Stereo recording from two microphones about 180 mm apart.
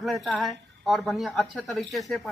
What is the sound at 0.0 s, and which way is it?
A woman's voice, centre (ahead or behind).